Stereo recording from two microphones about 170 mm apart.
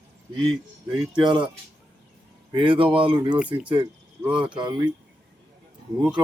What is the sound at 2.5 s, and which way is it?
Speech, 30° right (ahead or behind).